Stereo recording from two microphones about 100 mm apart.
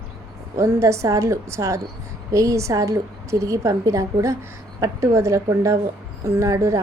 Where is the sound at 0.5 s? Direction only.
30° right (ahead or behind).